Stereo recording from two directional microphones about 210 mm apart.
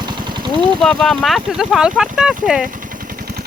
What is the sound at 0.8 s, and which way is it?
Speech, centre (ahead or behind).